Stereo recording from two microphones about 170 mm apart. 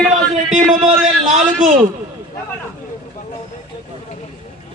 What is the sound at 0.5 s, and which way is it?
A man's voice, 45° right (ahead or behind).